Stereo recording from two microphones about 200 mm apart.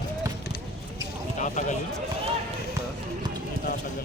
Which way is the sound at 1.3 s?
40° left (ahead or behind).